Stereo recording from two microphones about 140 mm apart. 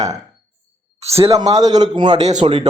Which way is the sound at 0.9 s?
45° right (ahead or behind).